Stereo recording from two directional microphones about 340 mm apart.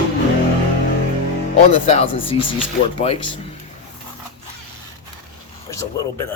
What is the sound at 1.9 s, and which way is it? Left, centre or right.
Speech, centre.